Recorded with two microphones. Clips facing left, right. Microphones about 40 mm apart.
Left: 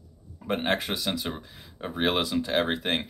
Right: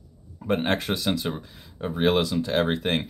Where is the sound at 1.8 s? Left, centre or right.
Centre.